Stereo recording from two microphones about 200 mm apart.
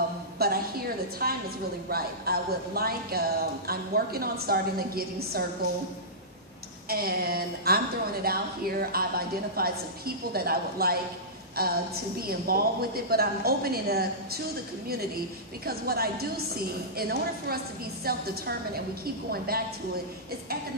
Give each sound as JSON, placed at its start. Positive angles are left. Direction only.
{"t": 0.4, "sound": "a sound", "side_deg": -50}
{"t": 1.2, "sound": "a woman's voice", "side_deg": -50}
{"t": 6.9, "sound": "a woman's voice", "side_deg": -50}
{"t": 15.6, "sound": "a woman's voice", "side_deg": -50}